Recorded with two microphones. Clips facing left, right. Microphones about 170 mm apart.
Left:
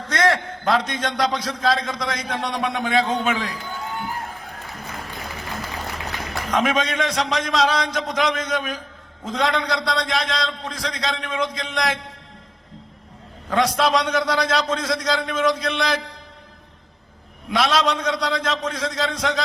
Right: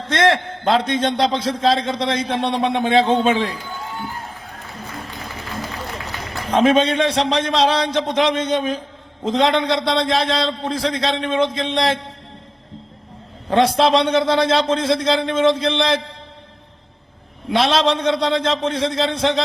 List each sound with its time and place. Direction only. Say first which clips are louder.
0.0 s a man's voice: right 3 dB; 25° right (ahead or behind)
6.5 s a man's voice: right 7 dB; 30° right (ahead or behind)
13.5 s a man's voice: right 4 dB; 30° right (ahead or behind)
17.5 s a man's voice: right 3 dB; 30° right (ahead or behind)